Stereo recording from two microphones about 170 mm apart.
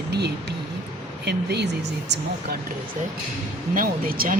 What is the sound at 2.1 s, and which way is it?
Speech, 90° right.